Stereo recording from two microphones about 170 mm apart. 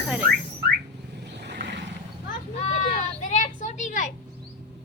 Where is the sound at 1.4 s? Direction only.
85° right.